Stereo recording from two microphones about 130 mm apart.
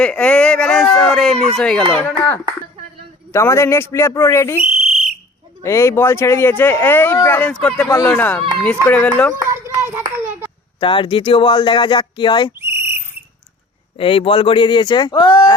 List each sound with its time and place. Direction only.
0.0 s a man's voice: 10° left (ahead or behind)
5.6 s speech: 20° left (ahead or behind)
7.9 s a man's voice: 30° left (ahead or behind)
8.1 s speech: 15° left (ahead or behind)
9.5 s hands: 25° right (ahead or behind)
10.8 s speech: 40° left (ahead or behind)
12.6 s owl: 15° right (ahead or behind)
14.0 s speech: 45° left (ahead or behind)